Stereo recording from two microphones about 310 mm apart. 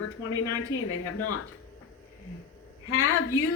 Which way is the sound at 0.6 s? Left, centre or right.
Left.